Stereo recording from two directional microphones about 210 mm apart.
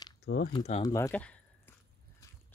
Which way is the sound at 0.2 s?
55° left (ahead or behind).